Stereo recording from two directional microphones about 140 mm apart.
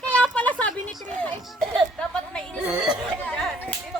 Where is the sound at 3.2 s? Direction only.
10° left (ahead or behind).